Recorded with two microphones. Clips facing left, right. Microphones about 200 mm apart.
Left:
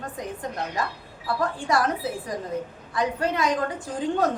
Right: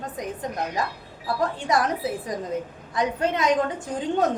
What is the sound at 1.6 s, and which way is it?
A woman's voice, 20° right (ahead or behind).